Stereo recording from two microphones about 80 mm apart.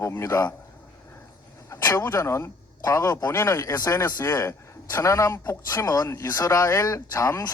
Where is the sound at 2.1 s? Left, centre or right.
Left.